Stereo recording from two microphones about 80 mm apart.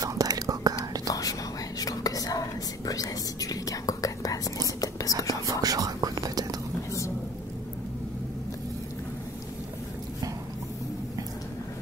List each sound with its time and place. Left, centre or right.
0.0 s whispering: right
1.0 s whispering: left
5.5 s whispering: right